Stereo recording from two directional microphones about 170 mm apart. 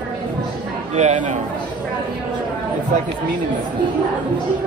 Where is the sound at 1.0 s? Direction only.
45° right (ahead or behind).